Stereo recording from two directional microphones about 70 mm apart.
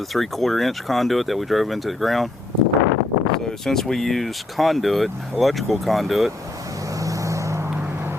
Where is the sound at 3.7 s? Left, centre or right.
Centre.